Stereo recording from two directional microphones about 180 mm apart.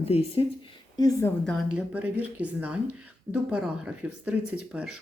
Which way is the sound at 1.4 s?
Centre (ahead or behind).